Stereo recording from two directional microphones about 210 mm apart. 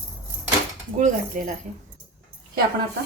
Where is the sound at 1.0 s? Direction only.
40° right (ahead or behind).